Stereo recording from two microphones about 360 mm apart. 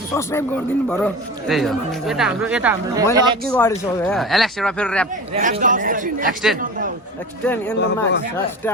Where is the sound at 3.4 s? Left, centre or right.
Centre.